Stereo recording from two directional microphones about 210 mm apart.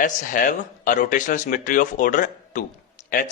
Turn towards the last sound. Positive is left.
turn(degrees=40)  # may be behind; listen again after turning